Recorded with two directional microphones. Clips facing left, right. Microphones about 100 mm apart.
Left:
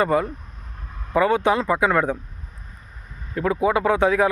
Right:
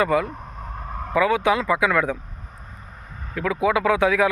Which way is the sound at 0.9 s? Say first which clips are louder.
Right 10 dB; 60° right (ahead or behind).